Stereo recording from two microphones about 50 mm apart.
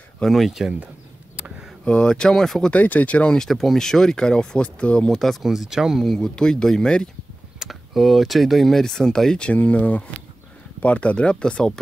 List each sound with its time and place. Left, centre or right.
0.3 s speech: centre
1.9 s speech: centre
2.7 s speech: left
3.4 s speech: centre; by 5.1 s left
5.1 s speech: centre
5.4 s speech: centre
6.1 s speech: centre
7.5 s a sound: centre
8.0 s speech: centre
9.5 s speech: left